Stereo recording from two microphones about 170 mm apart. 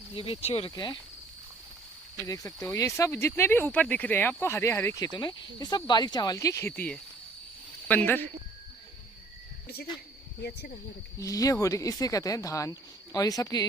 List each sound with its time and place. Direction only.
0.1 s speech: 35° left (ahead or behind)
2.2 s speech: 20° left (ahead or behind)
11.2 s speech: 20° left (ahead or behind)